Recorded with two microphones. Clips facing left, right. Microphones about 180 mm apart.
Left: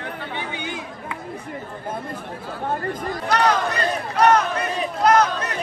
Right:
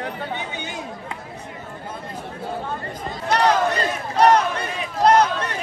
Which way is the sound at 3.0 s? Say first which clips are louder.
Right 1 dB; 25° right (ahead or behind).